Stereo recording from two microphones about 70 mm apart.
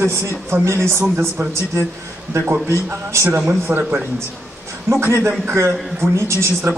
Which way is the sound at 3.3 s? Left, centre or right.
Right.